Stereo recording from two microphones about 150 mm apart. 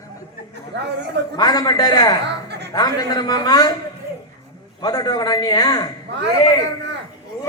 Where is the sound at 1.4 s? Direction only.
25° left (ahead or behind).